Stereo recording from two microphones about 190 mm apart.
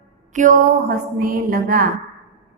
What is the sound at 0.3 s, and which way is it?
A woman's voice, 45° right (ahead or behind).